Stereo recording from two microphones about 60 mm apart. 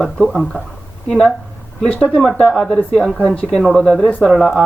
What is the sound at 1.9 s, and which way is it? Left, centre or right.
Speech, centre.